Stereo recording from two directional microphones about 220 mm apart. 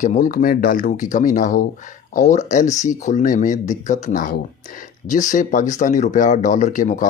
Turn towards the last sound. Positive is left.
turn(degrees=35)  # may be behind; listen again after turning